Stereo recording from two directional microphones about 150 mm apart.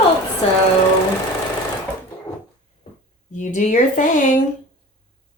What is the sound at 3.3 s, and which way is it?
Speech, 55° left (ahead or behind).